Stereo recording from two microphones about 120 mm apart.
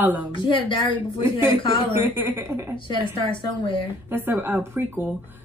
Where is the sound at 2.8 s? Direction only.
40° left (ahead or behind).